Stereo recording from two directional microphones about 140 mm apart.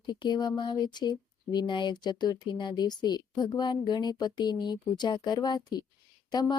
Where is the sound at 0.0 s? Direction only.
30° left (ahead or behind).